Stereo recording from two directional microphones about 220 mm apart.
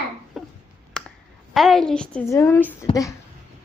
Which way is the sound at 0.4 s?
Centre (ahead or behind).